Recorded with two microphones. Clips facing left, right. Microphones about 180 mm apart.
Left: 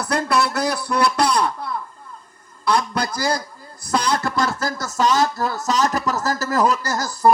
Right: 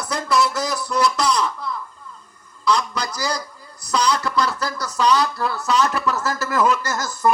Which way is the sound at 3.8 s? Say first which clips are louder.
Even; 50° left (ahead or behind).